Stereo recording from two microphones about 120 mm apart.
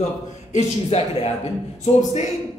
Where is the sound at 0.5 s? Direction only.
60° left (ahead or behind).